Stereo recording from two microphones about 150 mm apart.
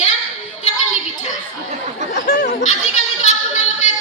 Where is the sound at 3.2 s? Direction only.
55° left (ahead or behind).